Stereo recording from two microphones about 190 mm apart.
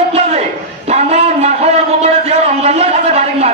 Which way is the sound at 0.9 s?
35° right (ahead or behind).